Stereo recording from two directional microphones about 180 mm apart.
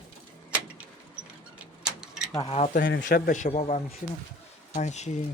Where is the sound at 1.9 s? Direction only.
5° right (ahead or behind).